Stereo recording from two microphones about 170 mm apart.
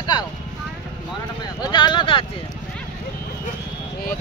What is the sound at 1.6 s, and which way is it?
Speech, 25° left (ahead or behind).